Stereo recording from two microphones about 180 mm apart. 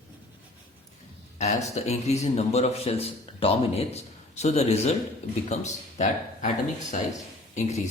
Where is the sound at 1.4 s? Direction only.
40° left (ahead or behind).